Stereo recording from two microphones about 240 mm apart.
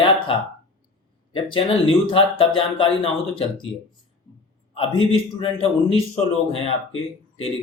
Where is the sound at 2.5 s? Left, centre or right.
Left.